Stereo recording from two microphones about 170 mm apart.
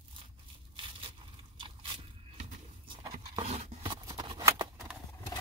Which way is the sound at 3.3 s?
35° right (ahead or behind).